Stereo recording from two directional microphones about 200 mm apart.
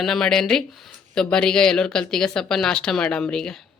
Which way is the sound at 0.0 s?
Centre (ahead or behind).